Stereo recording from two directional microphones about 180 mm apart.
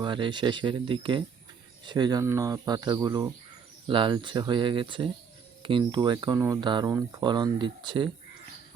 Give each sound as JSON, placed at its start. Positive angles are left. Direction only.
{"t": 0.0, "sound": "speech", "side_deg": -25}